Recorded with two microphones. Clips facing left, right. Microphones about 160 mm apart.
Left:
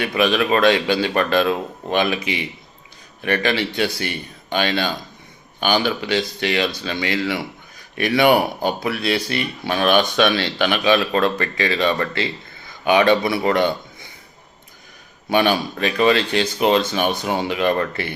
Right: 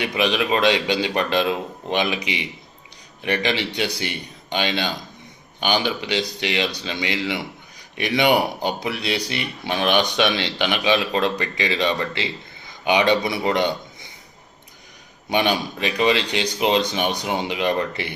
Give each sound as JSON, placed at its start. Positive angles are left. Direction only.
{"t": 0.0, "sound": "a man's voice", "side_deg": -20}
{"t": 15.3, "sound": "speech", "side_deg": -20}